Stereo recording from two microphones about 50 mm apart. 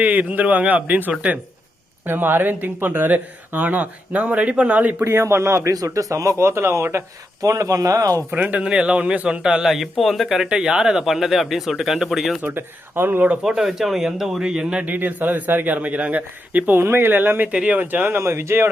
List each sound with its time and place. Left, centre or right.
0.0 s speech: right
5.0 s a man's voice: right
7.4 s a man's voice: right
8.3 s speech: right
9.6 s speech: centre
12.5 s speech: right
13.6 s speech: centre
14.8 s speech: right
16.7 s speech: right
18.2 s speech: right